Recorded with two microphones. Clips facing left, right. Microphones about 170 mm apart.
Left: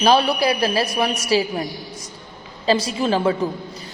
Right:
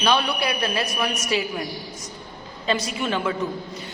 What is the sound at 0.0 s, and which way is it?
A man's voice, 35° left (ahead or behind).